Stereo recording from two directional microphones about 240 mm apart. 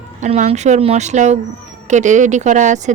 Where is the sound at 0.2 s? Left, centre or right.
Right.